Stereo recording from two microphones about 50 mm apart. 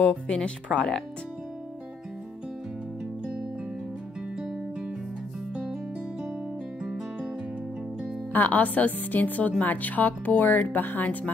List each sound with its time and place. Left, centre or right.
0.0 s speech: centre
6.8 s guitar: centre
8.3 s a woman's voice: left